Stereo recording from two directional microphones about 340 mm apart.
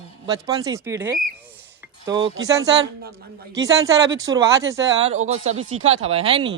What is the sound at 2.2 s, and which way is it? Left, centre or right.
Speech, right.